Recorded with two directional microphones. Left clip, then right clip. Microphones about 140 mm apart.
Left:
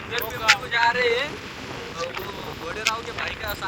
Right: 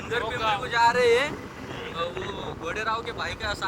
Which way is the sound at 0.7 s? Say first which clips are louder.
Even; 15° right (ahead or behind).